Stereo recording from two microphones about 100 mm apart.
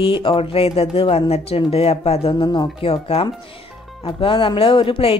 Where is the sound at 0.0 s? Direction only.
60° left (ahead or behind); by 1.2 s 75° left (ahead or behind).